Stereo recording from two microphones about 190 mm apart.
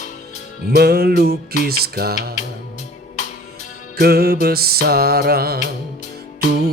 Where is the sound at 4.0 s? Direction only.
55° right (ahead or behind).